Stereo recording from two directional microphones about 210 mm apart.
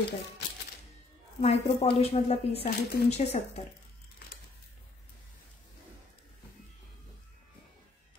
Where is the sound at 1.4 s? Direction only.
30° left (ahead or behind).